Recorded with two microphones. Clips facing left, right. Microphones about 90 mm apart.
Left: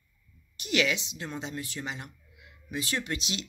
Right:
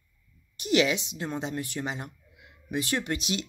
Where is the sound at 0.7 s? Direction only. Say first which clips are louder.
Right 4 dB; 30° right (ahead or behind).